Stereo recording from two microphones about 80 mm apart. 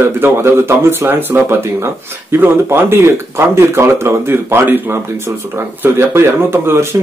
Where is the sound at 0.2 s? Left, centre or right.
Right.